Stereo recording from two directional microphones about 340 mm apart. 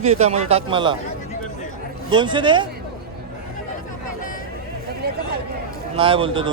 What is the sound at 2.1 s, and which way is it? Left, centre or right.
Speech, centre.